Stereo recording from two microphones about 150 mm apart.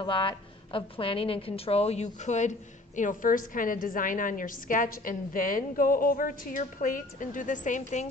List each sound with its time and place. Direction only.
0.0 s a woman's voice: 35° left (ahead or behind); by 2.5 s 50° left (ahead or behind)
3.0 s a woman's voice: 60° left (ahead or behind)